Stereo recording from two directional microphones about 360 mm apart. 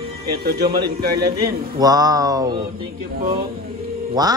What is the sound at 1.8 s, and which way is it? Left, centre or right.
Speech, centre.